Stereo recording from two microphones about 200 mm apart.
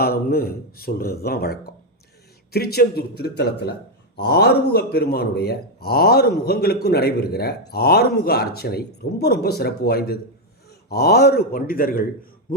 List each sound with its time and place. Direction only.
0.0 s speech: 50° left (ahead or behind)